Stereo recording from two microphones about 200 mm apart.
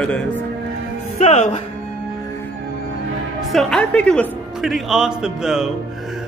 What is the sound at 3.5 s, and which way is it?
Speech, centre (ahead or behind).